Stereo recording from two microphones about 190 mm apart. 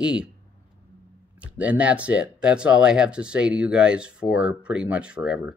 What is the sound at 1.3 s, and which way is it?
Speech, 5° right (ahead or behind).